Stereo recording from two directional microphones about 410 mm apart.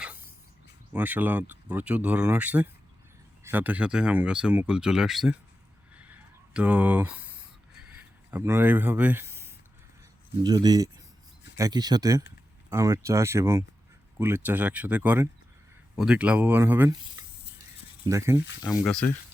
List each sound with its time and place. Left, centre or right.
0.9 s speech: centre
6.5 s speech: centre
7.8 s a sound: centre
10.4 s speech: centre